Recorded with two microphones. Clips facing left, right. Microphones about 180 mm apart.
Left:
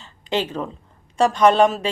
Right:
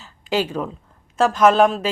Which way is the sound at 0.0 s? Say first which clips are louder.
Right 2 dB; 10° right (ahead or behind).